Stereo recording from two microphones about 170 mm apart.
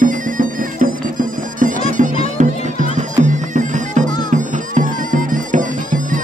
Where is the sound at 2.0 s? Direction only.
45° right (ahead or behind).